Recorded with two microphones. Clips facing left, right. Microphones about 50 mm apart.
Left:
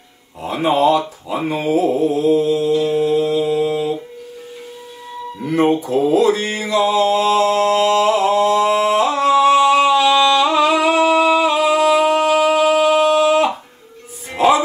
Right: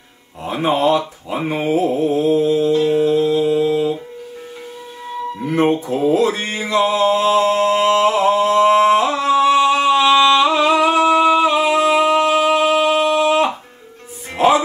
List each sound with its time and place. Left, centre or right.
0.4 s speech: right
1.9 s mantra: right
3.7 s music: right
5.6 s speech: right
6.7 s mantra: right
9.2 s a sound: right
11.2 s music: right